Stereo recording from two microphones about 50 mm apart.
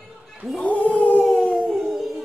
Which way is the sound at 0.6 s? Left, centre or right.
Left.